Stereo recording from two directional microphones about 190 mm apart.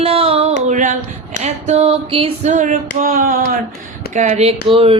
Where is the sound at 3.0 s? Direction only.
45° right (ahead or behind).